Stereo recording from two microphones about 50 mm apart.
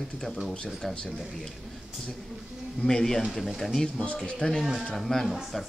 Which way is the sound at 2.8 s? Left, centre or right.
Centre.